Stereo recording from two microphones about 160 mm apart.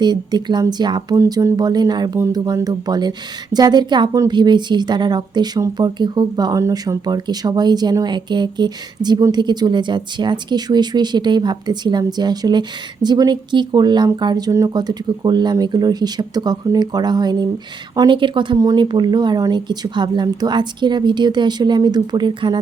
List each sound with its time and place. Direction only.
0.0 s speech: 25° right (ahead or behind)